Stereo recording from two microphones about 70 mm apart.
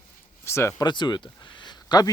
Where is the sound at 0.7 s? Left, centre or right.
Left.